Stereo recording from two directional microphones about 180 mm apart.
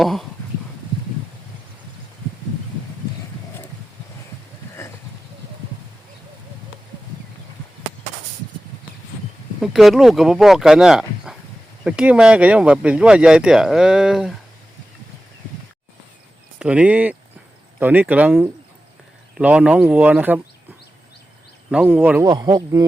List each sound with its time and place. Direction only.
0.0 s speech: centre (ahead or behind)
9.6 s speech: centre (ahead or behind)
16.6 s speech: 5° right (ahead or behind)
21.7 s speech: 5° right (ahead or behind)
22.2 s speech: 20° right (ahead or behind)